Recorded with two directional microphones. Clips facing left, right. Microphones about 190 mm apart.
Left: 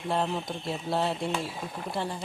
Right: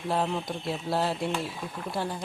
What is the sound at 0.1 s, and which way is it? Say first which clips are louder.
A woman's voice: right 1 dB; centre (ahead or behind).